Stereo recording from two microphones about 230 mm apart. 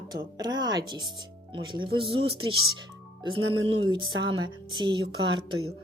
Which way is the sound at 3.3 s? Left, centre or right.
Right.